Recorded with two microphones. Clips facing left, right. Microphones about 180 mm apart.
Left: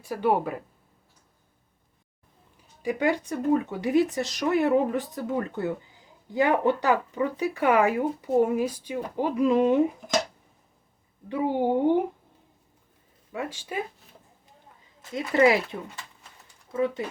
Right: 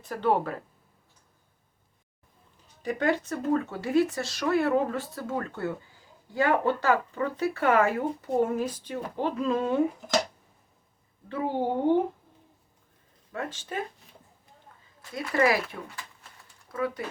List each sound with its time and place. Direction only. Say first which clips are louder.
0.0 s speech: left 1 dB; 10° left (ahead or behind)
2.8 s speech: left 1 dB; 10° left (ahead or behind)
11.3 s speech: left 4 dB; 15° left (ahead or behind)
13.3 s speech: left 2 dB; 10° left (ahead or behind)
15.1 s speech: left 4 dB; 20° left (ahead or behind)